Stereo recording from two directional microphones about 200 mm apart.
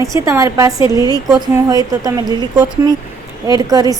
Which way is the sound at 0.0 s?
15° right (ahead or behind).